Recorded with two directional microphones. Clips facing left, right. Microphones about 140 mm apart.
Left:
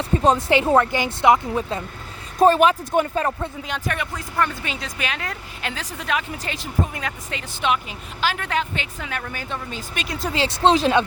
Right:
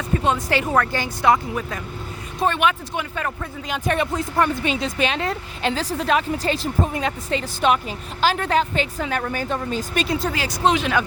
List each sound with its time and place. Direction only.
0.2 s speech: 30° left (ahead or behind)
2.4 s speech: 35° left (ahead or behind)
3.8 s a woman's voice: 30° right (ahead or behind)
10.3 s speech: 25° left (ahead or behind)